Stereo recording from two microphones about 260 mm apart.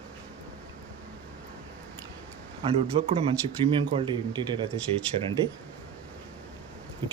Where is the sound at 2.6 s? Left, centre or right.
Right.